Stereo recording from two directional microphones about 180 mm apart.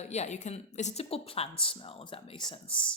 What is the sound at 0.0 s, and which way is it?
A woman's voice, 40° left (ahead or behind).